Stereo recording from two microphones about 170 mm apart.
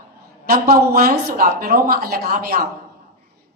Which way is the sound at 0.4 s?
60° right (ahead or behind).